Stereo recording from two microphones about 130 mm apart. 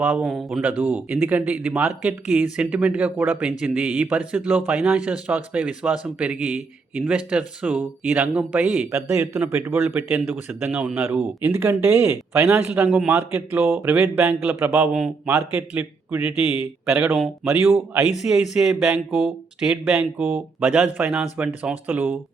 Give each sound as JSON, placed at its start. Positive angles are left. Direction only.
{"t": 0.0, "sound": "speech", "side_deg": -10}
{"t": 8.9, "sound": "speech", "side_deg": -20}